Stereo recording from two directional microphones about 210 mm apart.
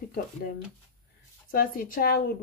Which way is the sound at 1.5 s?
40° left (ahead or behind).